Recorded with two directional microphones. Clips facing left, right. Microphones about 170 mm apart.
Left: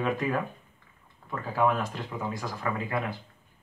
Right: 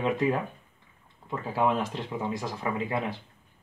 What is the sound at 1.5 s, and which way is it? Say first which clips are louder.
Speech: even; 25° right (ahead or behind).